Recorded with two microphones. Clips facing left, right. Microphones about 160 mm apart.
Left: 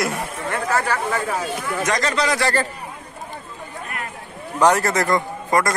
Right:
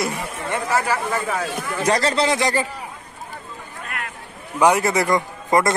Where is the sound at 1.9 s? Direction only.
30° right (ahead or behind); by 2.7 s 15° right (ahead or behind).